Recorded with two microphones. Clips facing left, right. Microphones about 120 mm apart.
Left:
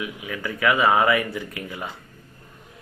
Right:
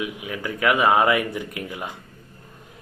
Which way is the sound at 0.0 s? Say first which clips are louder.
Right 1 dB; 20° right (ahead or behind).